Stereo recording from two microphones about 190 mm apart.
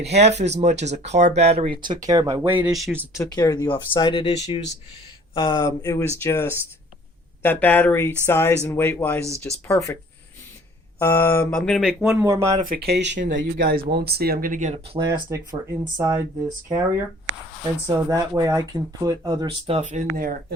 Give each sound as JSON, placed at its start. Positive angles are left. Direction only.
{"t": 0.0, "sound": "speech", "side_deg": -35}
{"t": 3.2, "sound": "speech", "side_deg": 20}
{"t": 11.0, "sound": "a sound", "side_deg": 10}
{"t": 12.2, "sound": "speech", "side_deg": -15}
{"t": 12.5, "sound": "speech", "side_deg": -45}
{"t": 14.9, "sound": "speech", "side_deg": -25}